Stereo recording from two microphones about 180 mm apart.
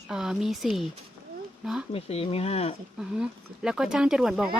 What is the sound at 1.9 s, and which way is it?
Speech, 35° left (ahead or behind).